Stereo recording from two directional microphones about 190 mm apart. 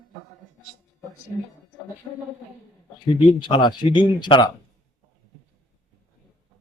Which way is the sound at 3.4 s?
25° left (ahead or behind).